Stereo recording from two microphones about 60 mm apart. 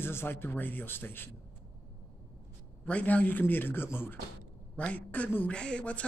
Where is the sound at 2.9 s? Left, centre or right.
Left.